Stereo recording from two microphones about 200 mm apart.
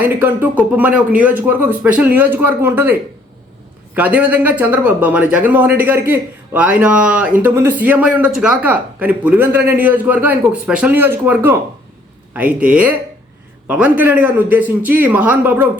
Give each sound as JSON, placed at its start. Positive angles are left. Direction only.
{"t": 0.0, "sound": "speech", "side_deg": -10}